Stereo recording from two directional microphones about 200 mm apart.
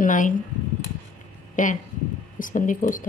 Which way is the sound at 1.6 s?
40° left (ahead or behind).